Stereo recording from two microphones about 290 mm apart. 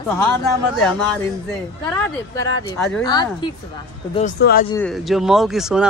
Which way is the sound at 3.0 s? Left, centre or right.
Centre.